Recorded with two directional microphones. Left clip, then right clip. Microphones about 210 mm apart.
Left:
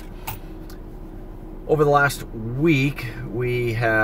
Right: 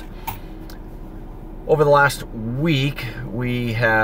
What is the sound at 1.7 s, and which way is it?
Speech, 5° right (ahead or behind).